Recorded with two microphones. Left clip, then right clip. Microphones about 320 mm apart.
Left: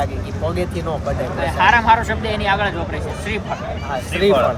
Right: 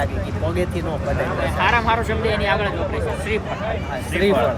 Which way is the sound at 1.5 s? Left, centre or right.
Left.